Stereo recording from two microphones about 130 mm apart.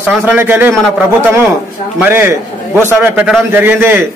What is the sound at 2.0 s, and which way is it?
A man's voice, 15° right (ahead or behind).